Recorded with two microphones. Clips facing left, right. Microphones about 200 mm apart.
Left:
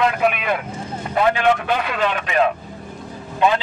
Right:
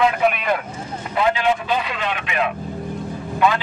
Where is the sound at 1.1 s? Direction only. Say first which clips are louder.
Left 2 dB; 55° left (ahead or behind); by 2.5 s 40° left (ahead or behind).